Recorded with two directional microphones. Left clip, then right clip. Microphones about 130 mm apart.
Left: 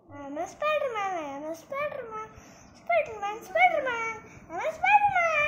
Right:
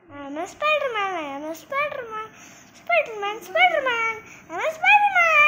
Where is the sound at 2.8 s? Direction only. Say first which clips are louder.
Right 5 dB; 25° right (ahead or behind).